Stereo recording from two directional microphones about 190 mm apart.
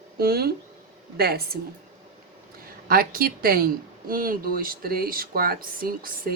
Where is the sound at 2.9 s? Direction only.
50° right (ahead or behind).